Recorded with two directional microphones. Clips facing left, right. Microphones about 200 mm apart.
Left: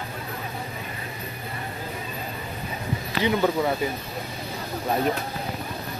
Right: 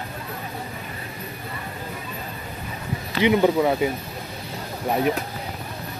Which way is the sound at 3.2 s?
20° right (ahead or behind).